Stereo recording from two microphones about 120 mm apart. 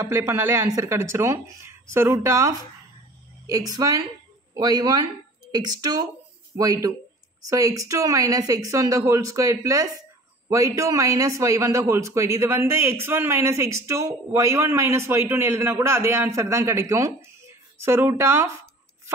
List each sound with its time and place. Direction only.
0.1 s a man's voice: 25° right (ahead or behind)